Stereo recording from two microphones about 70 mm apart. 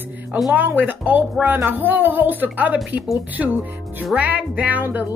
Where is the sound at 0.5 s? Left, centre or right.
Right.